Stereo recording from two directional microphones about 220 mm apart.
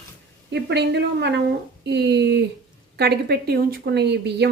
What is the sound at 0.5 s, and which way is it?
Speech, 50° right (ahead or behind).